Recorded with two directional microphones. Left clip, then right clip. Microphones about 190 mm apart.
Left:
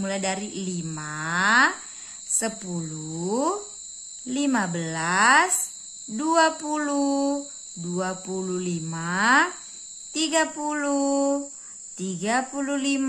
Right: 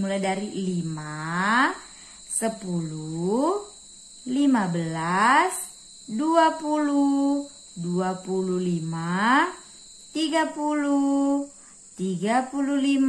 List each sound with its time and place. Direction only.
0.0 s cricket: 35° left (ahead or behind)
12.0 s speech: 30° left (ahead or behind)